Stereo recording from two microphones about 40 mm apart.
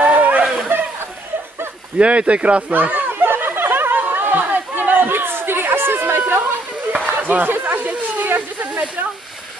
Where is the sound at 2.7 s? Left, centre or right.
Right.